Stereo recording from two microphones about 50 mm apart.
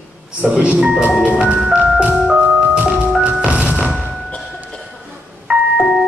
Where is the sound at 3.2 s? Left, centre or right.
Right.